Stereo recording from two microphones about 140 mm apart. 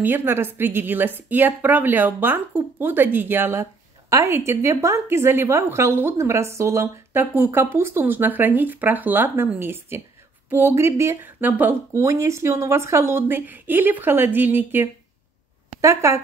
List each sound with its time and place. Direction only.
0.0 s a woman's voice: 15° right (ahead or behind)